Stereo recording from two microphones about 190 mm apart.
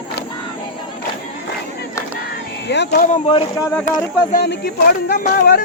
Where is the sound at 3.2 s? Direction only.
30° left (ahead or behind).